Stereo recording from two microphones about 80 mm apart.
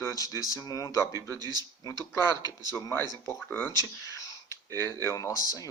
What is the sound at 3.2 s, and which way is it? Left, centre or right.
Speech, left.